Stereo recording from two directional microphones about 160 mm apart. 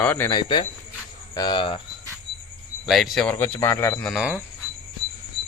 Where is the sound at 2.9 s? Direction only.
Centre (ahead or behind).